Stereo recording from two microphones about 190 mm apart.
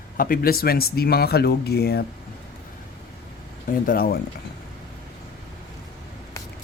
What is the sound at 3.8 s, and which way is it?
Speech, 50° left (ahead or behind).